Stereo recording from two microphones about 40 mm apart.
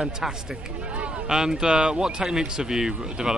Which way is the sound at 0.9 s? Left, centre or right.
Right.